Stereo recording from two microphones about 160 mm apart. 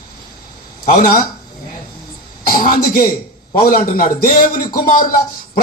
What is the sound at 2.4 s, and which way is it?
A man's voice, 60° left (ahead or behind).